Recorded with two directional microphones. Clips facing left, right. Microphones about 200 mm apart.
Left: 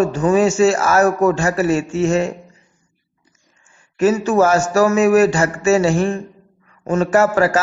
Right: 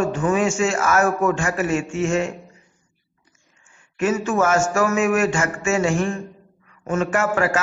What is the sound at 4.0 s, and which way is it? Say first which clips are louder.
A man's voice: left 6 dB; 35° left (ahead or behind).